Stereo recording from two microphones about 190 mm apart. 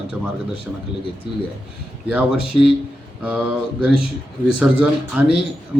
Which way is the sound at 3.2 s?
5° right (ahead or behind).